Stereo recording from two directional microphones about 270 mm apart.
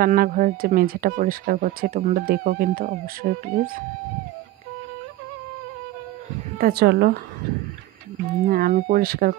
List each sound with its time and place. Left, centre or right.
0.0 s speech: right
6.6 s speech: right
8.5 s speech: right